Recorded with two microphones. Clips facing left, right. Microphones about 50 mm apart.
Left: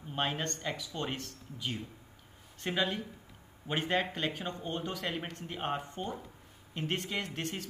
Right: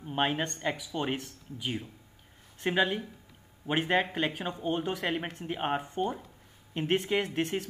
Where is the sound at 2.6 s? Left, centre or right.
Centre.